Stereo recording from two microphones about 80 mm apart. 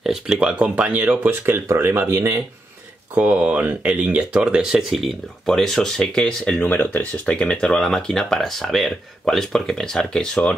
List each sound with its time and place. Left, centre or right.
0.0 s speech: centre; by 2.4 s right
3.2 s speech: centre
6.6 s speech: left